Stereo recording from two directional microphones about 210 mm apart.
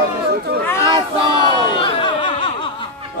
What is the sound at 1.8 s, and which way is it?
Music, 25° left (ahead or behind).